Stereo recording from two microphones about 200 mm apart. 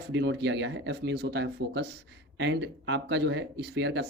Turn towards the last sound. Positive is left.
turn(degrees=-60)  # may be behind; listen again after turning